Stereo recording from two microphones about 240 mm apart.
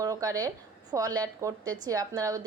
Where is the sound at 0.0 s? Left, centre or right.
Centre.